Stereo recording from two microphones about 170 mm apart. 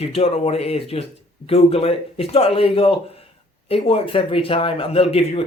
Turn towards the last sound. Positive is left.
turn(degrees=35)  # may be behind; listen again after turning